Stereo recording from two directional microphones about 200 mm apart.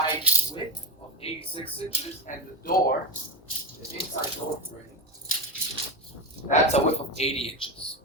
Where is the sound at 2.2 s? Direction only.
45° left (ahead or behind).